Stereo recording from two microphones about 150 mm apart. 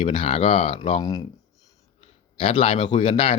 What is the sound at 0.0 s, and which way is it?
Speech, 40° left (ahead or behind).